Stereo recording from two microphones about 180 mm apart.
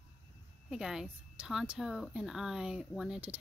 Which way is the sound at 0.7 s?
5° right (ahead or behind).